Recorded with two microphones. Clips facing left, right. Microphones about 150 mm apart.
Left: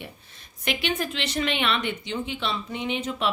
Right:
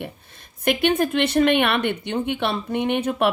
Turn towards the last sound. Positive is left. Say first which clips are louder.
# right 7 dB
turn(degrees=-60)  # may be behind; listen again after turning